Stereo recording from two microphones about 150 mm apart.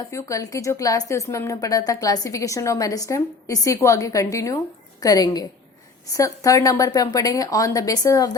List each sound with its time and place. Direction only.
0.0 s a woman's voice: 20° left (ahead or behind)